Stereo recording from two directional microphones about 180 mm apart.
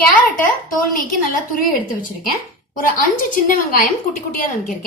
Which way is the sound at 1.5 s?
50° left (ahead or behind).